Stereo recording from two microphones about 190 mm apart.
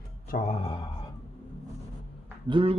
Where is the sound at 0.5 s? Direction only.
30° left (ahead or behind).